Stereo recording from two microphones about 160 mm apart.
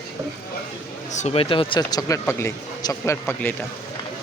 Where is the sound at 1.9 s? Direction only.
20° left (ahead or behind).